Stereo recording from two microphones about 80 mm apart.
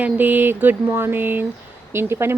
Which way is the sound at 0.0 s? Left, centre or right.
Right.